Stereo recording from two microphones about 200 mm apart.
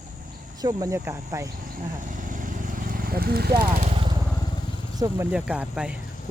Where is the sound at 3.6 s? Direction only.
40° right (ahead or behind).